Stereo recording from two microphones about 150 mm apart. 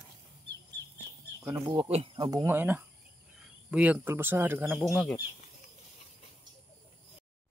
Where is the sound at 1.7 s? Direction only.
40° right (ahead or behind).